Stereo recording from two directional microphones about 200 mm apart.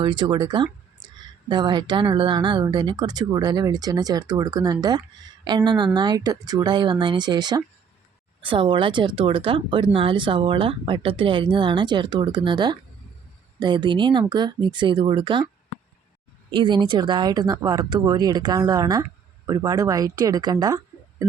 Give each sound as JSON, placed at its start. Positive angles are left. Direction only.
{"t": 0.0, "sound": "speech", "side_deg": -25}
{"t": 16.5, "sound": "speech", "side_deg": -25}